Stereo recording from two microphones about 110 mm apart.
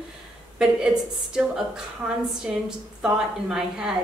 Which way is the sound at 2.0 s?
20° right (ahead or behind).